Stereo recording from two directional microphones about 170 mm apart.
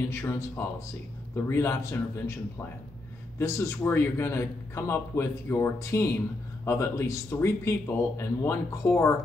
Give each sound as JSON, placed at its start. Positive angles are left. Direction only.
{"t": 0.1, "sound": "a man's voice", "side_deg": 15}
{"t": 3.3, "sound": "a man's voice", "side_deg": 15}